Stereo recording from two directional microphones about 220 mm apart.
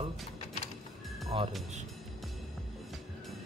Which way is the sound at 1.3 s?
25° right (ahead or behind).